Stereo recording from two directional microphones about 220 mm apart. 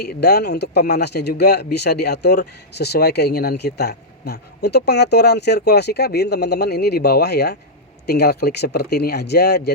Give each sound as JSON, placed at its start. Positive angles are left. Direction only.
{"t": 0.0, "sound": "speech", "side_deg": 50}